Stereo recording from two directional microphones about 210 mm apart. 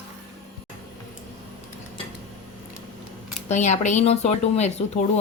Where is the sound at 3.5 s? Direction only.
35° left (ahead or behind).